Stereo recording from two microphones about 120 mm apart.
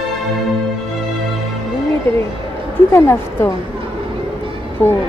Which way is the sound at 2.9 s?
20° left (ahead or behind).